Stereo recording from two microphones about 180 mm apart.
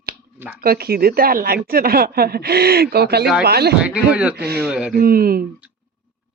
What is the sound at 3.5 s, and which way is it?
Speech, 60° right (ahead or behind).